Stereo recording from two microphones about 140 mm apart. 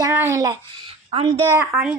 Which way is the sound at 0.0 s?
20° right (ahead or behind).